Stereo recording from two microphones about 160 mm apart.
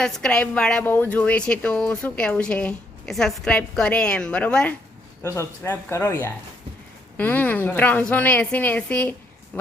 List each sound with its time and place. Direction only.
0.0 s speech: 5° left (ahead or behind)